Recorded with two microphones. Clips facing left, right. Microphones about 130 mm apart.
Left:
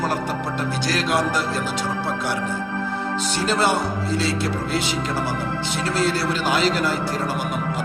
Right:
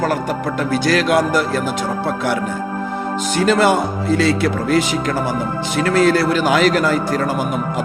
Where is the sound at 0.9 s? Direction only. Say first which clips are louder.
Right 6 dB; 60° right (ahead or behind).